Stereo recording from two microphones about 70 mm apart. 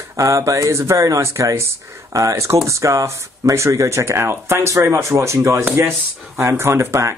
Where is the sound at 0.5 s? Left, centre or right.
Right.